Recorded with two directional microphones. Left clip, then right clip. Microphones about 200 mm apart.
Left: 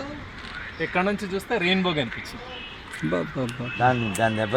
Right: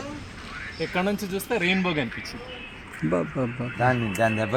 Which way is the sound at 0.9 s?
5° left (ahead or behind).